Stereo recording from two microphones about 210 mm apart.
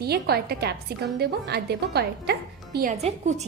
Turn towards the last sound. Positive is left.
turn(degrees=-30)  # may be behind; listen again after turning